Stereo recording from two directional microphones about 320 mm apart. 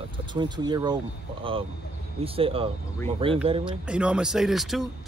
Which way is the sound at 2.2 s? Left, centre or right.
Centre.